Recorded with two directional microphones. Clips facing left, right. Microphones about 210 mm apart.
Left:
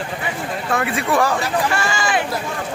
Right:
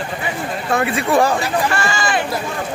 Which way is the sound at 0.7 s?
25° right (ahead or behind).